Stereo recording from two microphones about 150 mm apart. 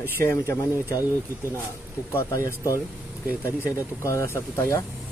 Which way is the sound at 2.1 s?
20° left (ahead or behind).